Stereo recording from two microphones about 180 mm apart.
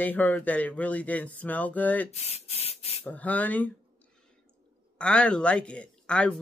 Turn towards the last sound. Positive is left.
turn(degrees=5)  # may be behind; listen again after turning